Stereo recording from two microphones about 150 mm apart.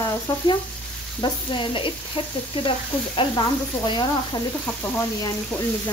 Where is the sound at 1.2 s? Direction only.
35° left (ahead or behind).